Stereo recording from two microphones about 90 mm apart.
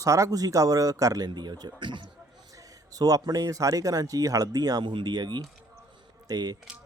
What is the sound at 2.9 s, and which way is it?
A man's voice, 45° right (ahead or behind).